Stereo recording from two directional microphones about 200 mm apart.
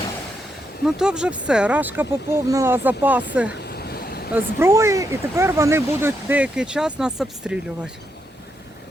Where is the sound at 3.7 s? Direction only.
50° left (ahead or behind).